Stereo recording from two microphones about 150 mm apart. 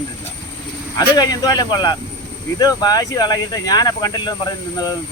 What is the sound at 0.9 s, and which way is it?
Speech, 25° left (ahead or behind).